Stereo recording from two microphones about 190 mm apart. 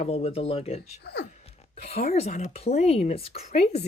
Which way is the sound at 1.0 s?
60° left (ahead or behind).